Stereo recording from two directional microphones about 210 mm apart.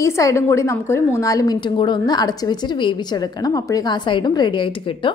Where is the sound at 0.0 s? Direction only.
15° left (ahead or behind).